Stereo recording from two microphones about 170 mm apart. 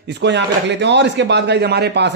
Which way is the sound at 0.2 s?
90° right.